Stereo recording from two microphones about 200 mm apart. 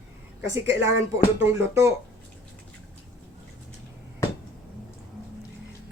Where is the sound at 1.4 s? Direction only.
15° right (ahead or behind).